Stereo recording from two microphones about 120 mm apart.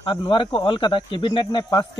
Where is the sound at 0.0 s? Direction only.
45° left (ahead or behind).